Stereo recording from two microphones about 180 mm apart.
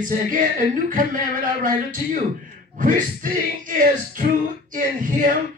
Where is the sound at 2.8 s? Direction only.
50° right (ahead or behind).